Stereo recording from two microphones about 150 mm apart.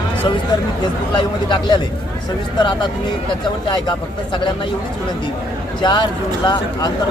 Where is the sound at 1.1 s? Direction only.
30° left (ahead or behind).